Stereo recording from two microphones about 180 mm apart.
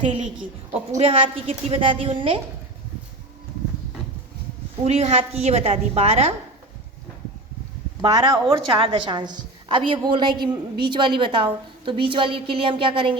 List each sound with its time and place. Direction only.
0.7 s a woman's voice: 35° right (ahead or behind)
4.9 s a woman's voice: 35° right (ahead or behind)
8.0 s a woman's voice: 20° right (ahead or behind)